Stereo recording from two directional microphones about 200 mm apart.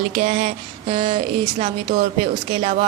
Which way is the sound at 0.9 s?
30° right (ahead or behind).